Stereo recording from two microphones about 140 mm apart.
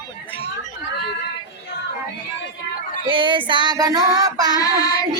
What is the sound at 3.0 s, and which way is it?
Child singing, 35° right (ahead or behind).